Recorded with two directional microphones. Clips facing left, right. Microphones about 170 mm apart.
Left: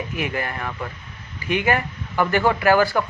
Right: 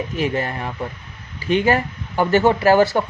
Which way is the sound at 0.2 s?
30° right (ahead or behind).